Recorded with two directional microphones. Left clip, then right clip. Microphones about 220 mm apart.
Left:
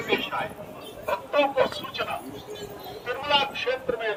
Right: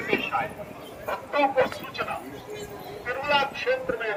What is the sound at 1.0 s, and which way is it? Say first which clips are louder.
Fowl: left 1 dB; 30° left (ahead or behind).